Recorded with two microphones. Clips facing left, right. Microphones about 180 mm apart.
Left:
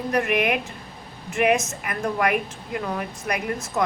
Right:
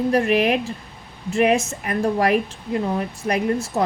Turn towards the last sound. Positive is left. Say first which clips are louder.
# right 4 dB
turn(degrees=-30)  # may be behind; listen again after turning